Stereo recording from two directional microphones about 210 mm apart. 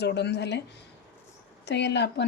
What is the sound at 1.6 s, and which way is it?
Speech, 55° left (ahead or behind).